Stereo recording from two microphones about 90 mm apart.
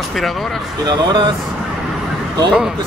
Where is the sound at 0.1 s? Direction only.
Centre (ahead or behind).